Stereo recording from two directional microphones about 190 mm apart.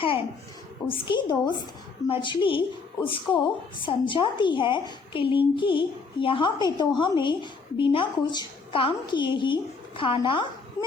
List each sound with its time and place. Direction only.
0.9 s a woman's voice: 25° left (ahead or behind)